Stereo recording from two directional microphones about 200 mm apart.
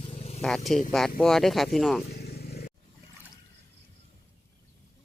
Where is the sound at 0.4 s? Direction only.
Centre (ahead or behind).